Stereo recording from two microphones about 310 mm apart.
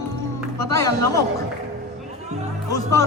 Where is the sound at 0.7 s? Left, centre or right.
Centre.